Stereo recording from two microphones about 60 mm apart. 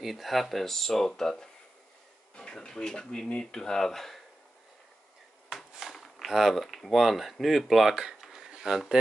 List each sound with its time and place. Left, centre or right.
0.0 s speech: centre
3.3 s speech: left
3.6 s speech: centre
5.5 s speech: centre